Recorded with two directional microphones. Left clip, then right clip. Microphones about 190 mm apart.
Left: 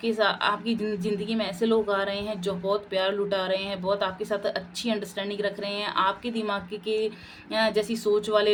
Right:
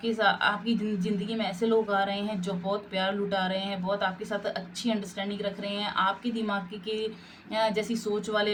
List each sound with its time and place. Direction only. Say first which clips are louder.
0.0 s speech: left 1 dB; 50° left (ahead or behind)